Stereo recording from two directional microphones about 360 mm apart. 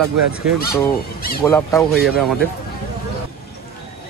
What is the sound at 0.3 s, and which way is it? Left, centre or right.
Speech, centre.